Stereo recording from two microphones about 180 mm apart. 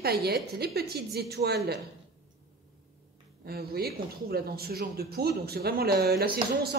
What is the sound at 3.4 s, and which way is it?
Speech, 60° right (ahead or behind).